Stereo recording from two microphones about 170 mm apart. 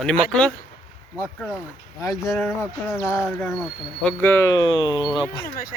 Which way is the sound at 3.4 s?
5° left (ahead or behind).